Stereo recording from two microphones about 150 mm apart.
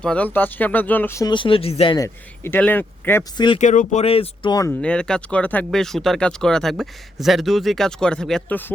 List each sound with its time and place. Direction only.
0.0 s speech: 5° left (ahead or behind)
1.3 s speech: 35° left (ahead or behind)
2.0 s speech: 15° left (ahead or behind)
3.3 s speech: 30° left (ahead or behind)
3.6 s speech: 55° left (ahead or behind)
4.8 s speech: 5° left (ahead or behind)